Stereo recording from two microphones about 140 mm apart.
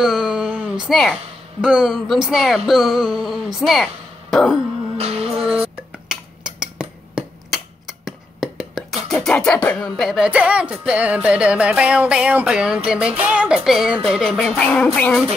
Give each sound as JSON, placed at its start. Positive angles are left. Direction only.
{"t": 0.0, "sound": "a sound", "side_deg": -5}
{"t": 1.6, "sound": "speech", "side_deg": -5}
{"t": 4.9, "sound": "music", "side_deg": -45}
{"t": 5.4, "sound": "dishes", "side_deg": -5}
{"t": 9.9, "sound": "music", "side_deg": 0}
{"t": 15.0, "sound": "speech", "side_deg": 5}